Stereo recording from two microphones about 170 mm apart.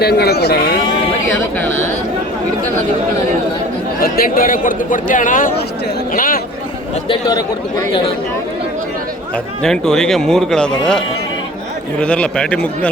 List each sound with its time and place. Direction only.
0.0 s speech: 70° left (ahead or behind)
1.5 s speech: 10° left (ahead or behind)
4.0 s a man's voice: 60° left (ahead or behind)
7.1 s speech: 25° left (ahead or behind)
9.6 s speech: 5° left (ahead or behind)